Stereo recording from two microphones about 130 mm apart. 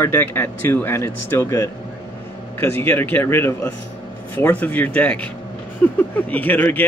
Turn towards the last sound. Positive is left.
turn(degrees=15)  # may be behind; listen again after turning